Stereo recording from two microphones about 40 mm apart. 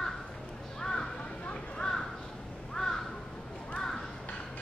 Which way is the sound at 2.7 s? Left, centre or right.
Centre.